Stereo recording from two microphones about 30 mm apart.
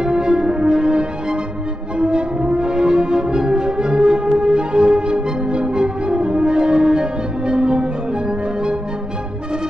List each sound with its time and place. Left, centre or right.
0.0 s music: right